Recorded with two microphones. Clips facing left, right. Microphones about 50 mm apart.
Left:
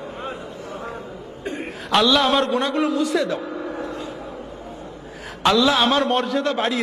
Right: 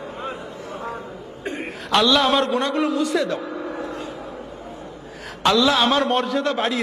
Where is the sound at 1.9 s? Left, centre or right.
Centre.